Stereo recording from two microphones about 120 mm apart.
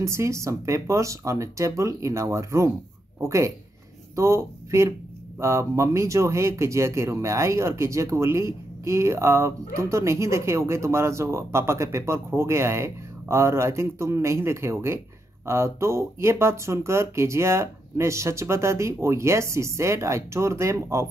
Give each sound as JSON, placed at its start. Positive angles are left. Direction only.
{"t": 0.0, "sound": "speech", "side_deg": -25}